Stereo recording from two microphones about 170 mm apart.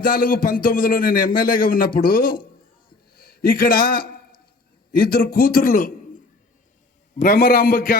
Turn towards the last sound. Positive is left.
turn(degrees=55)  # may be behind; listen again after turning